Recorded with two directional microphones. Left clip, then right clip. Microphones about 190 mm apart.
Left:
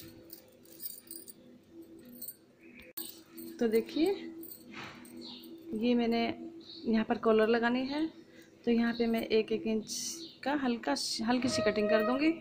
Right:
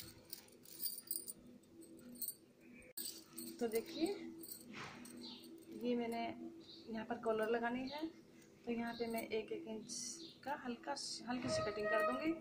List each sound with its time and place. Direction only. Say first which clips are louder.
3.5 s a woman's voice: left 11 dB; 50° left (ahead or behind)
5.8 s speech: left 11 dB; 50° left (ahead or behind)